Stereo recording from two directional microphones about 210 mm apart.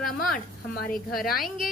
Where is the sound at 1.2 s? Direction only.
45° left (ahead or behind).